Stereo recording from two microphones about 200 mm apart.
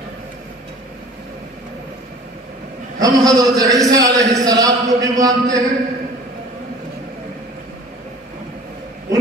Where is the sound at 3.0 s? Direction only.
20° right (ahead or behind).